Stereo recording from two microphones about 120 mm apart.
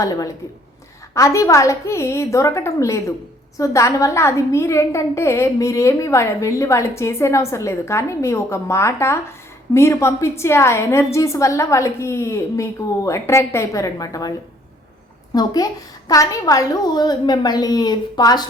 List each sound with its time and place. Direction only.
0.0 s a woman's voice: 30° left (ahead or behind)
15.4 s a woman's voice: 30° left (ahead or behind)